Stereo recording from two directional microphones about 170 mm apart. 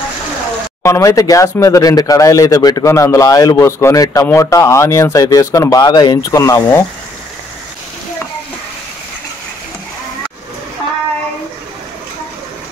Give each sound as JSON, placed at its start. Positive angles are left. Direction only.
{"t": 0.8, "sound": "speech", "side_deg": 20}